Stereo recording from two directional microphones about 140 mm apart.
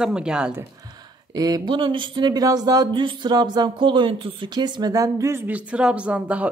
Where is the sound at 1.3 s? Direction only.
25° right (ahead or behind).